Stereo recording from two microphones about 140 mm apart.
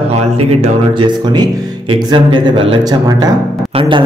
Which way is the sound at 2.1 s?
40° right (ahead or behind).